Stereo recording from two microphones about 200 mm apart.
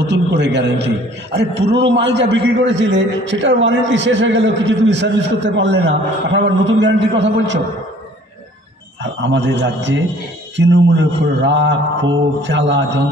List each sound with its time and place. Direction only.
0.0 s a man's voice: 60° right (ahead or behind)
9.0 s a man's voice: 65° right (ahead or behind)